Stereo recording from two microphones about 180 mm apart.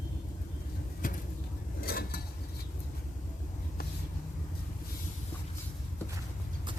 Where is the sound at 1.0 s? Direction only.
50° left (ahead or behind).